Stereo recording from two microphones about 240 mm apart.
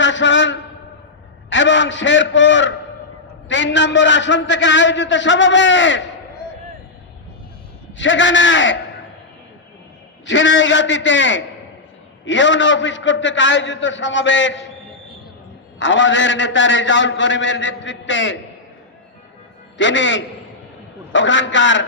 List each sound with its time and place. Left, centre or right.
0.0 s a sound: left
1.5 s a man's voice: left
7.9 s a man's voice: left
10.2 s a man's voice: left
15.8 s a man's voice: left
19.8 s a man's voice: left